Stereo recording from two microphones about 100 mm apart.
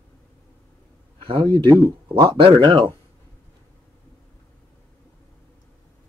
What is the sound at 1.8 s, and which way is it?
Speech, 40° right (ahead or behind).